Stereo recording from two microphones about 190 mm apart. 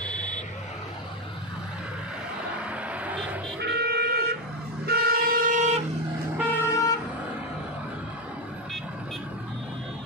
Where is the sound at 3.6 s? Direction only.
60° right (ahead or behind).